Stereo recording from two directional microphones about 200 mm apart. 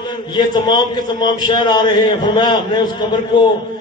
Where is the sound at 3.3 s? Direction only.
20° left (ahead or behind).